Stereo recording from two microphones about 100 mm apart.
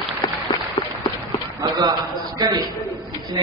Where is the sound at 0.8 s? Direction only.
90° left.